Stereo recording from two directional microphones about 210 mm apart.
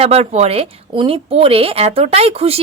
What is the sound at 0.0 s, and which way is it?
A woman's voice, 30° right (ahead or behind).